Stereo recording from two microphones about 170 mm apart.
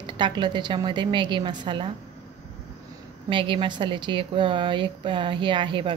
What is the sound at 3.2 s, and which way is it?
Speech, 30° right (ahead or behind).